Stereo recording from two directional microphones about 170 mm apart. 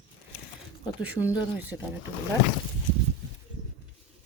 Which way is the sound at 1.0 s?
5° right (ahead or behind).